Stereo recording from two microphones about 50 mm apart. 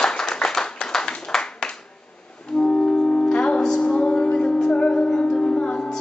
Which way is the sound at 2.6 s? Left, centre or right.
Centre.